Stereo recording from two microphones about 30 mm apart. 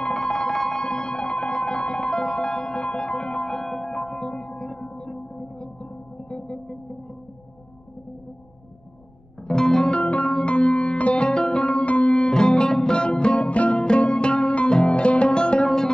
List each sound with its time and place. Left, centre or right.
0.0 s music: left
0.6 s music: centre
0.8 s music: left
1.5 s music: left
3.4 s music: centre
4.3 s gong: left
9.5 s music: left
11.0 s music: left
12.1 s music: left
13.5 s music: left
13.7 s music: left
15.6 s music: left